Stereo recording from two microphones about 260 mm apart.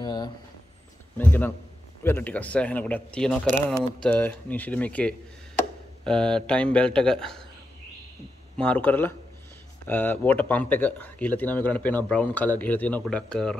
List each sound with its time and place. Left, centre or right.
0.0 s vehicle: centre
1.1 s speech: centre
8.5 s speech: centre